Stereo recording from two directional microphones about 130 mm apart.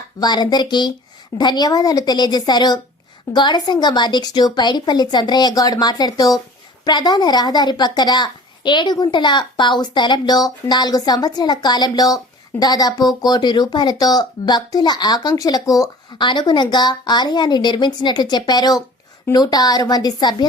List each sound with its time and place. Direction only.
0.2 s a woman's voice: 35° left (ahead or behind)